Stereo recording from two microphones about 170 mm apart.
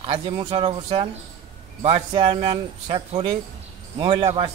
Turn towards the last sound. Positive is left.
turn(degrees=-30)  # may be behind; listen again after turning